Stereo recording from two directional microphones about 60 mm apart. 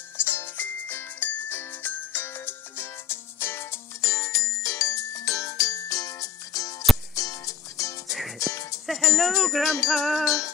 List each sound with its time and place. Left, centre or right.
0.2 s music: left
8.8 s speech: centre
9.8 s music: centre